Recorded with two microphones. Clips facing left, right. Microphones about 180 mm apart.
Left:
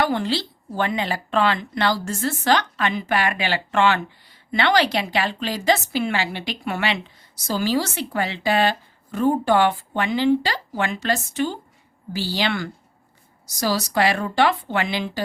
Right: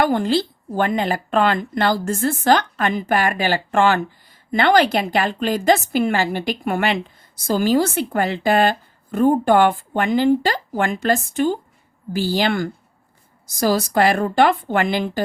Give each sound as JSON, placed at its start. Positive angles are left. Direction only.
{"t": 0.0, "sound": "a woman's voice", "side_deg": -50}